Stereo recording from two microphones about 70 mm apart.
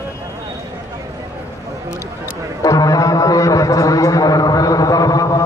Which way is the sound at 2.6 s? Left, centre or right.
Left.